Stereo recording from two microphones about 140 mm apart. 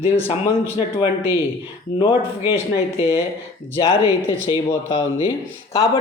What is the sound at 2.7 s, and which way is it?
Speech, 45° left (ahead or behind).